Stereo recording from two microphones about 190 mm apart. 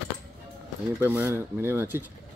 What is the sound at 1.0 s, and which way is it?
Speech, 10° right (ahead or behind).